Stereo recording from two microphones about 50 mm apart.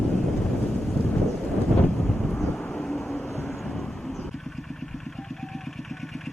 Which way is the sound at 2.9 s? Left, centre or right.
Centre.